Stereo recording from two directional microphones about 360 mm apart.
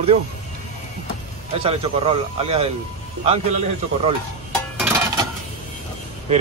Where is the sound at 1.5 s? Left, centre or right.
Centre.